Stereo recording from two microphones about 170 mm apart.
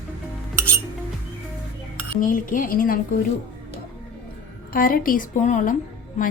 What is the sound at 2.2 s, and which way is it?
A woman's voice, 50° left (ahead or behind).